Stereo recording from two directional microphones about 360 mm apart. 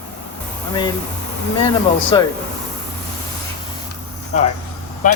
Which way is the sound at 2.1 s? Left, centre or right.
Centre.